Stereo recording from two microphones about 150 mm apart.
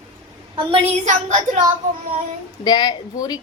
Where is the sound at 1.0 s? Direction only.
55° right (ahead or behind).